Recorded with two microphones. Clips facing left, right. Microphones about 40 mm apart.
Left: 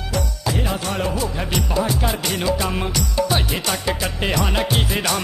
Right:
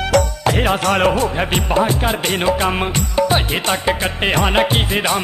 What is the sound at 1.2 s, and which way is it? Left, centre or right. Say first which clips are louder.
Music: right 5 dB; right.